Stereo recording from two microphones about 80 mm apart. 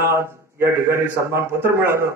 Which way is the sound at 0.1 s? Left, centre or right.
Right.